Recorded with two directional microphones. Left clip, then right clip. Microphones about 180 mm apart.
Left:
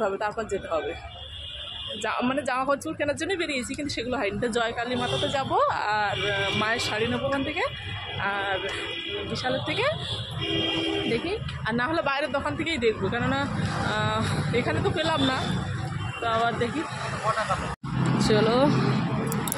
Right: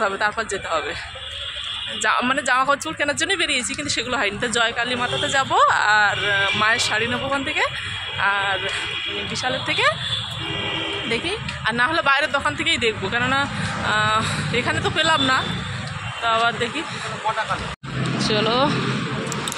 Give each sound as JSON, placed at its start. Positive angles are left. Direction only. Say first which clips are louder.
{"t": 0.2, "sound": "speech", "louder": "right 6 dB", "side_deg": 0}
{"t": 2.0, "sound": "speech", "louder": "right 8 dB", "side_deg": -5}
{"t": 11.1, "sound": "speech", "louder": "right 4 dB", "side_deg": 0}
{"t": 18.1, "sound": "speech", "louder": "right 2 dB", "side_deg": 30}